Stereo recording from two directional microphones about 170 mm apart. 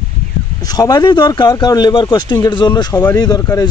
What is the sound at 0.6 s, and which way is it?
A man's voice, 20° left (ahead or behind).